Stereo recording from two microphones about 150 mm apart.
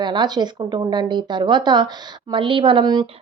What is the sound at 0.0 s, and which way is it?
A woman's voice, 30° right (ahead or behind).